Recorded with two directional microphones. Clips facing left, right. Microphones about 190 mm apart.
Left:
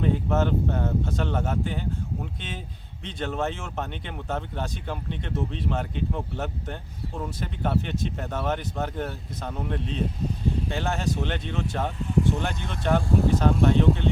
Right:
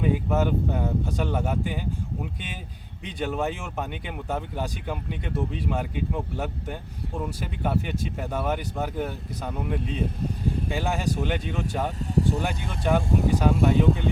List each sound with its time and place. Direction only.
0.0 s speech: 10° right (ahead or behind)
3.0 s speech: 10° right (ahead or behind)
11.9 s speech: 40° right (ahead or behind)
12.4 s speech: 10° right (ahead or behind)